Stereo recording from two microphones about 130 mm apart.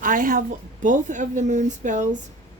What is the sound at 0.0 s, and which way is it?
Speech, 90° right.